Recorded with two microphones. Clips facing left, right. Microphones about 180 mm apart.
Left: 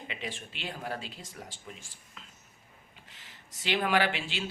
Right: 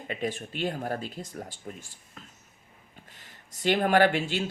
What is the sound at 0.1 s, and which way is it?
Speech, 45° right (ahead or behind).